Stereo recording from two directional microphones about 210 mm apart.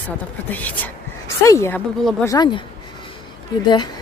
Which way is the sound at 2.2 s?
20° left (ahead or behind).